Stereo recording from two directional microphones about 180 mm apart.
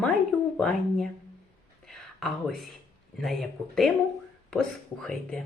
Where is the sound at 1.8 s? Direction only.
5° left (ahead or behind).